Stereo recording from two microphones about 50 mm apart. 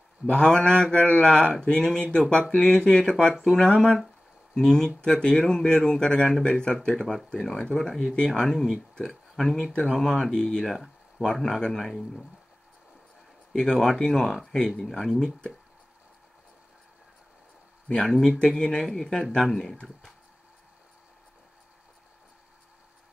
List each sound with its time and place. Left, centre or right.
0.3 s speech: centre
8.3 s speech: centre
10.6 s speech: centre
13.5 s speech: centre
18.0 s speech: centre